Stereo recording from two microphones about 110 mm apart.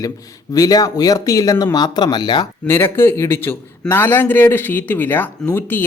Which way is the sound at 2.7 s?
20° left (ahead or behind).